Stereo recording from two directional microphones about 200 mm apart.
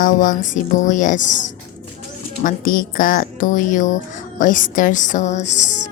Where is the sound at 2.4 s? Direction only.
45° left (ahead or behind).